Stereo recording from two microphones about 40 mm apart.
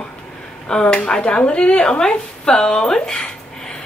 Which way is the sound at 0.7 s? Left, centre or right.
Centre.